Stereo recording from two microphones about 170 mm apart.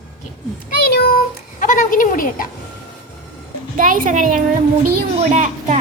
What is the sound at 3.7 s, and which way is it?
Speech, 50° right (ahead or behind).